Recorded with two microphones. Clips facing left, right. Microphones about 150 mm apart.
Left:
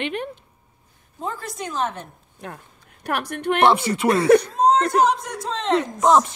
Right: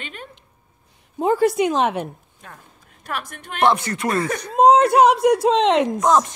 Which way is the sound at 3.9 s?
10° left (ahead or behind).